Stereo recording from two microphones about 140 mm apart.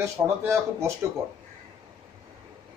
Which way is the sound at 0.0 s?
20° right (ahead or behind).